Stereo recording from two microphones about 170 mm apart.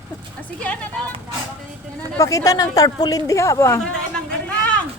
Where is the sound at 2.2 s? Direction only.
20° left (ahead or behind).